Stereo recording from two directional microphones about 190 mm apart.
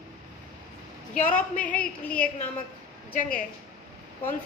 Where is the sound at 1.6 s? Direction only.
10° left (ahead or behind).